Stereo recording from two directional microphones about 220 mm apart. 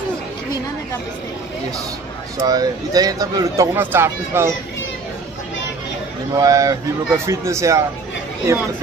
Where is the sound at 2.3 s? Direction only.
15° right (ahead or behind).